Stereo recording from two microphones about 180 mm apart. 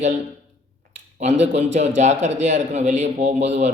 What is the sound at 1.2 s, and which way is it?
A man's voice, 40° right (ahead or behind).